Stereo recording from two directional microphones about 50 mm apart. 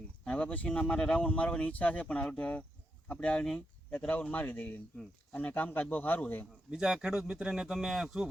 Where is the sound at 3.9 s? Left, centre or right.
Left.